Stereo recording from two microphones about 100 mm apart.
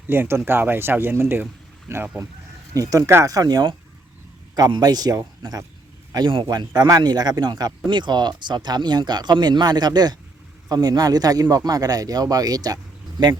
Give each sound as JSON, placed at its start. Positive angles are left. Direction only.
{"t": 0.1, "sound": "speech", "side_deg": -25}
{"t": 2.7, "sound": "speech", "side_deg": -35}
{"t": 3.3, "sound": "speech", "side_deg": -40}
{"t": 6.1, "sound": "speech", "side_deg": -55}